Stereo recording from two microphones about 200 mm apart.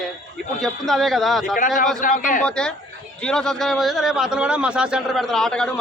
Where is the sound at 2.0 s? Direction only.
40° left (ahead or behind).